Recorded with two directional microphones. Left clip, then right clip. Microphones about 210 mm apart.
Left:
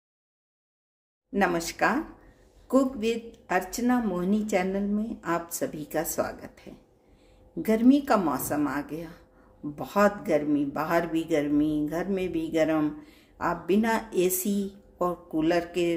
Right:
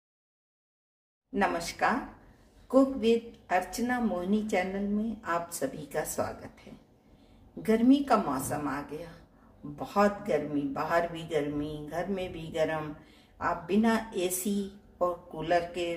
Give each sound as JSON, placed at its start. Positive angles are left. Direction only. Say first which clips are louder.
{"t": 1.3, "sound": "a woman's voice", "louder": "left 3 dB", "side_deg": 50}
{"t": 7.6, "sound": "a woman's voice", "louder": "left 2 dB", "side_deg": 55}